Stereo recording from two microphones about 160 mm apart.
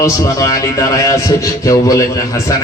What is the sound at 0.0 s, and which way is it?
Speech, 20° left (ahead or behind).